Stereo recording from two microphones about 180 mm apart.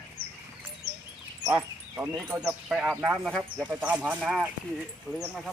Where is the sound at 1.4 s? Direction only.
15° right (ahead or behind).